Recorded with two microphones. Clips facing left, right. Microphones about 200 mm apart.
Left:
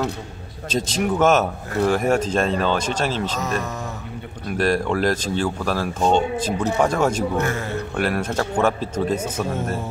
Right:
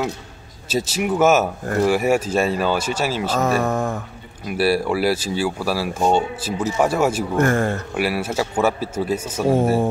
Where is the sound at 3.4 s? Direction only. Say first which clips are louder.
Right 7 dB; 50° right (ahead or behind).